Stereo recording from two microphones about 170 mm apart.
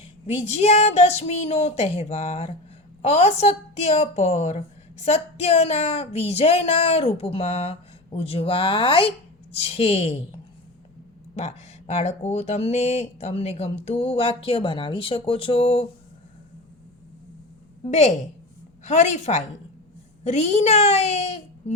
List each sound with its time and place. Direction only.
0.3 s a woman's voice: 40° left (ahead or behind)
11.3 s a woman's voice: 40° left (ahead or behind)
17.8 s a woman's voice: 45° left (ahead or behind)